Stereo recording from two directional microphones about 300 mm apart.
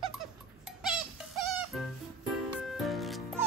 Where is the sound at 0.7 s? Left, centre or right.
Centre.